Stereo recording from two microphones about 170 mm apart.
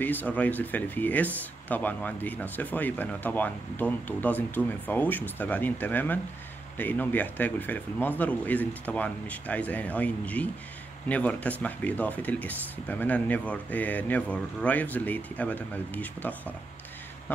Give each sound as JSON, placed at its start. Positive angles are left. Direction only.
{"t": 0.0, "sound": "speech", "side_deg": 10}